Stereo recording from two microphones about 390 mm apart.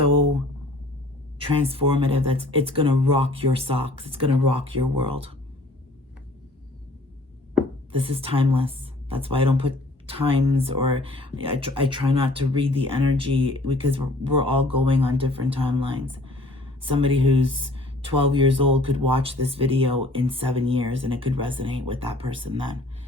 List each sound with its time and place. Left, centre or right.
1.4 s speech: centre
7.9 s speech: centre